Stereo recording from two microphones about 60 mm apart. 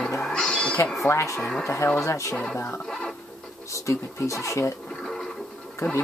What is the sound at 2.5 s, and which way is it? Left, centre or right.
Music, left.